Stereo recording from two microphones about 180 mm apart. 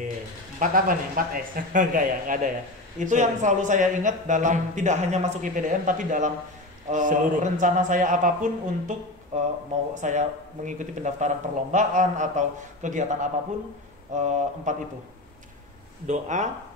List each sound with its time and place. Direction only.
0.6 s speech: 50° right (ahead or behind)
16.1 s speech: 40° right (ahead or behind)